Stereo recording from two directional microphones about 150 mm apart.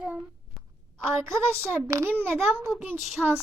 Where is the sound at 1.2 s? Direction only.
20° right (ahead or behind).